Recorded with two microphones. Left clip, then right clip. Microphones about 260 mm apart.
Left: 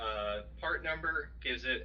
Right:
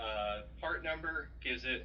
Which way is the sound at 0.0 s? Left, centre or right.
Left.